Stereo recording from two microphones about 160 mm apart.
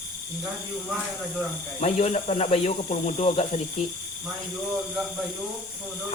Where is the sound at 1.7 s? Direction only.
45° left (ahead or behind).